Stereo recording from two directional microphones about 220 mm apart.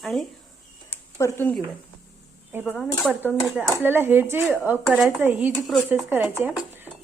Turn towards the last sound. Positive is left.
turn(degrees=-10)  # may be behind; listen again after turning